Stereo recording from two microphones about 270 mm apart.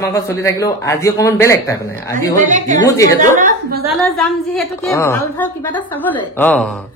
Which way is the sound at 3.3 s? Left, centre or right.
Right.